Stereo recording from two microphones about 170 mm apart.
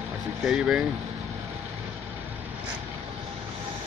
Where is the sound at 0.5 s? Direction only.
5° right (ahead or behind).